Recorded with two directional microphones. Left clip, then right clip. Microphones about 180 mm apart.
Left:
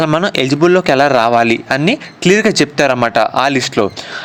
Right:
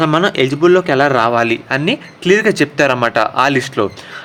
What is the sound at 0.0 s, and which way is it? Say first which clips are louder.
Speech: even; 35° left (ahead or behind).